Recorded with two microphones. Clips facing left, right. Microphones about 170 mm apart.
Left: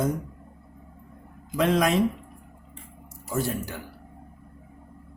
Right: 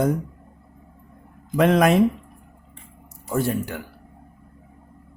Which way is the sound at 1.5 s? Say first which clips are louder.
Right 5 dB; 60° right (ahead or behind).